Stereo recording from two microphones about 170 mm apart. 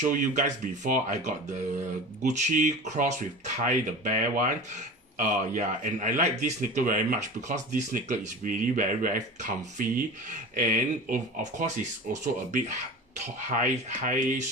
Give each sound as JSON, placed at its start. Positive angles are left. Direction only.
{"t": 0.0, "sound": "speech", "side_deg": -50}
{"t": 13.5, "sound": "speech", "side_deg": -50}